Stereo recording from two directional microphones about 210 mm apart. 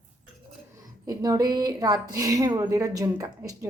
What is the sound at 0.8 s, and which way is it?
Speech, 15° right (ahead or behind).